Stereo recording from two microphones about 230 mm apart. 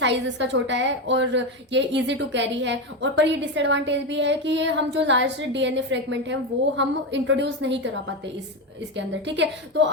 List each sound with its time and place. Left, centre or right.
0.0 s a woman's voice: right
9.0 s a woman's voice: right